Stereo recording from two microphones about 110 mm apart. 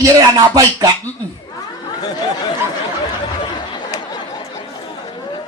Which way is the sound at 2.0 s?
35° left (ahead or behind).